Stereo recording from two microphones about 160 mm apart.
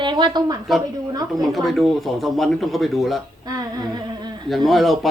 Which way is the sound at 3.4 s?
25° right (ahead or behind).